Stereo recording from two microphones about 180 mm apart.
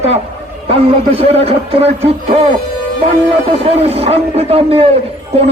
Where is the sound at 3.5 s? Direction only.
35° right (ahead or behind).